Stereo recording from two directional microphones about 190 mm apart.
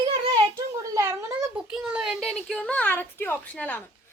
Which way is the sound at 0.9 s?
15° right (ahead or behind).